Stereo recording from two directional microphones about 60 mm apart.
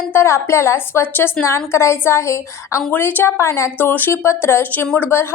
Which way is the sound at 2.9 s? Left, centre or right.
Left.